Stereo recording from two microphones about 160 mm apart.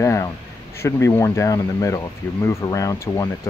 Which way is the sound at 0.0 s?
20° left (ahead or behind).